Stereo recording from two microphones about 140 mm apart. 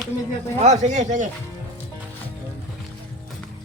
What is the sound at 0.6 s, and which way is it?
Speech, 55° right (ahead or behind).